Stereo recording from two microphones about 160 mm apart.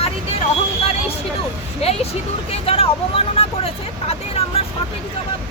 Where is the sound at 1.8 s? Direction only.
40° left (ahead or behind).